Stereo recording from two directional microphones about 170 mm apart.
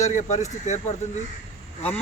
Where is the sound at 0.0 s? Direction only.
45° left (ahead or behind).